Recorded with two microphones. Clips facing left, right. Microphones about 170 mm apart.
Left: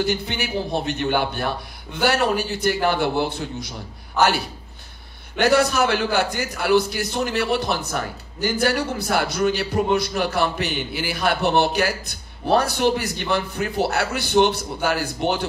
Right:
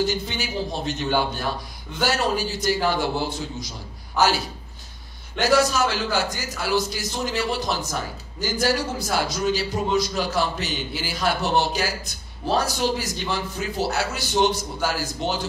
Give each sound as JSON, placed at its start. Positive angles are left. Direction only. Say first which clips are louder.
{"t": 0.0, "sound": "a man's voice", "louder": "left 1 dB", "side_deg": 60}
{"t": 5.4, "sound": "a man's voice", "louder": "left 2 dB", "side_deg": 60}